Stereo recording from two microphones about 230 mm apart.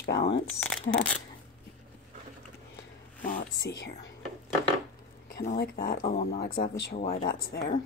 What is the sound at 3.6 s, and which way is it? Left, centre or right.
Speech, left.